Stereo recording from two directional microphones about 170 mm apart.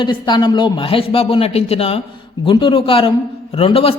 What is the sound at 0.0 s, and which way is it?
A man's voice, 25° left (ahead or behind).